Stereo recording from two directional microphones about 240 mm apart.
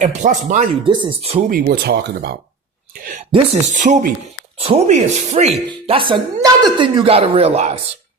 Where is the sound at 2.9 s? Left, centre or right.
Right.